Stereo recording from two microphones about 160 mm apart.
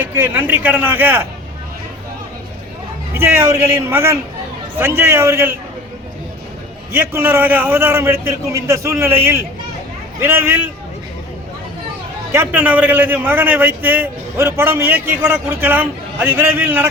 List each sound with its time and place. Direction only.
0.0 s a man's voice: 10° right (ahead or behind)
3.2 s a man's voice: 15° right (ahead or behind)
6.9 s a man's voice: 15° right (ahead or behind)
12.3 s a man's voice: 15° right (ahead or behind)